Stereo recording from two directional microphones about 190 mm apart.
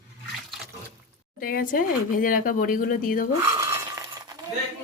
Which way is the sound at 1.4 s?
50° left (ahead or behind).